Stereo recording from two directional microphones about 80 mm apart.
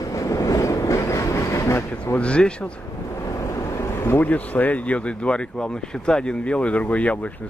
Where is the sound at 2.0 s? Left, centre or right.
Centre.